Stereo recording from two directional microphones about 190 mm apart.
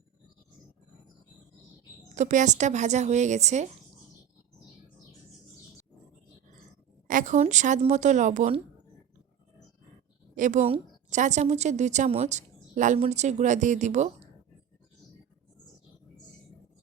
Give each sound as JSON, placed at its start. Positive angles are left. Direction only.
{"t": 2.1, "sound": "a woman's voice", "side_deg": -40}
{"t": 7.1, "sound": "a woman's voice", "side_deg": -40}
{"t": 10.3, "sound": "a woman's voice", "side_deg": -40}